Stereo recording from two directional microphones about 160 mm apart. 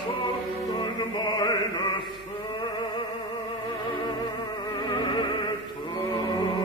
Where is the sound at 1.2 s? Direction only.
25° left (ahead or behind).